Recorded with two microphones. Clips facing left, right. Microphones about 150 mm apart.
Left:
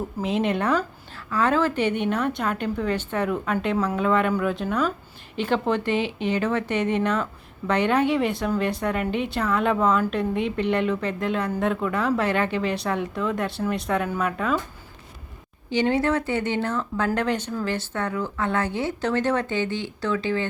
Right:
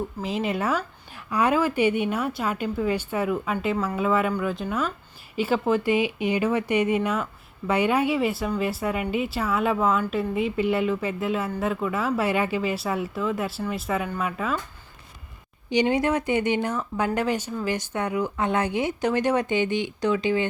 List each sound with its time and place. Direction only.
0.2 s a woman's voice: centre (ahead or behind)
15.7 s speech: 15° right (ahead or behind)